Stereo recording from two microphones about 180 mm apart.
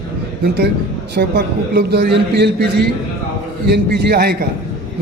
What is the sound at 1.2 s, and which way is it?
A man's voice, 65° right (ahead or behind).